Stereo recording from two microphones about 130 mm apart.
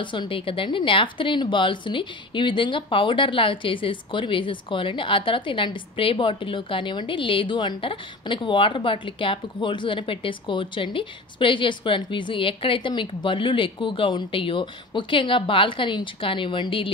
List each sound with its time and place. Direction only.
0.0 s a woman's voice: 40° left (ahead or behind)